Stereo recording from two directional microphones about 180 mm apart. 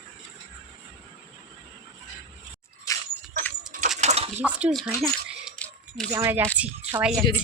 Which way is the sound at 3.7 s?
45° right (ahead or behind).